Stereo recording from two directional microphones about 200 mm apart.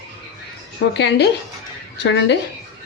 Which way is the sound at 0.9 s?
60° left (ahead or behind).